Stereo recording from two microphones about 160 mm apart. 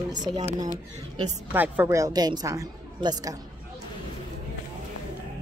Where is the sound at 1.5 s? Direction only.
10° right (ahead or behind).